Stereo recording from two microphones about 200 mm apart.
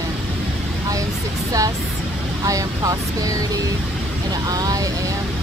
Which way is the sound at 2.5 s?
15° right (ahead or behind).